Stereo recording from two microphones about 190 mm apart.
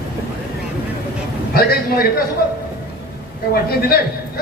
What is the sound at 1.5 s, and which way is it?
Speech, 50° left (ahead or behind).